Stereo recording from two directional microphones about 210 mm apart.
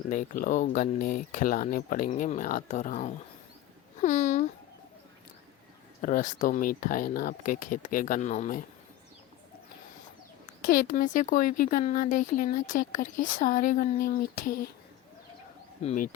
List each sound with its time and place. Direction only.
0.1 s speech: 40° left (ahead or behind)
4.0 s a sound: 35° left (ahead or behind)
6.0 s speech: 40° left (ahead or behind)
10.7 s speech: 40° left (ahead or behind)
15.8 s speech: 30° left (ahead or behind)